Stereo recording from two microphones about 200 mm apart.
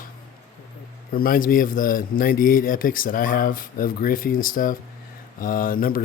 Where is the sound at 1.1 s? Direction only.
45° left (ahead or behind).